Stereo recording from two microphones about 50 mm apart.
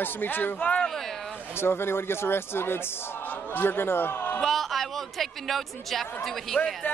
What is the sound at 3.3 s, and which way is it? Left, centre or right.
Speech, left.